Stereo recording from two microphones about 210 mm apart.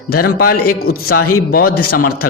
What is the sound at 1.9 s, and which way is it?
Speech, 45° left (ahead or behind).